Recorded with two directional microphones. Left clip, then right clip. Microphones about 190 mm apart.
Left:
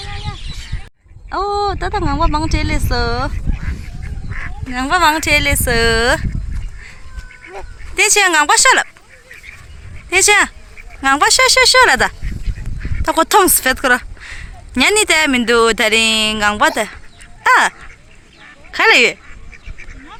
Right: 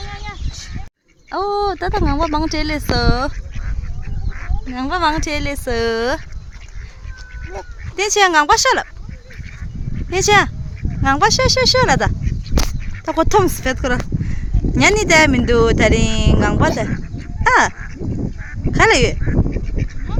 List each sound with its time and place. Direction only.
1.3 s speech: 10° right (ahead or behind)
4.3 s goose: 60° right (ahead or behind)
4.7 s speech: centre (ahead or behind)
7.9 s speech: 10° right (ahead or behind)
10.1 s speech: 10° right (ahead or behind)